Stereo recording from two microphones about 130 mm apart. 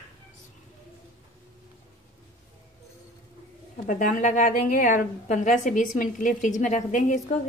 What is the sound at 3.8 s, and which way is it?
A woman's voice, 85° left.